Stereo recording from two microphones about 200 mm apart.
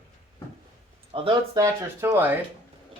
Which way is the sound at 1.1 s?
25° right (ahead or behind).